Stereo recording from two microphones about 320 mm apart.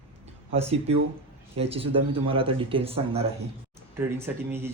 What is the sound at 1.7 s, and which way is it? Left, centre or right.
Speech, centre.